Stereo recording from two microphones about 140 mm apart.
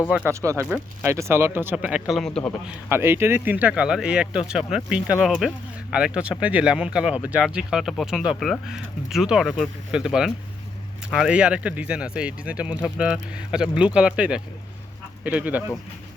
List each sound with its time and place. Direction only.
0.3 s speech: 20° right (ahead or behind); by 2.5 s 5° left (ahead or behind)
2.6 s speech: 15° right (ahead or behind)